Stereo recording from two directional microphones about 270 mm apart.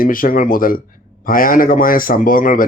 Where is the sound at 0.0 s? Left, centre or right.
Left.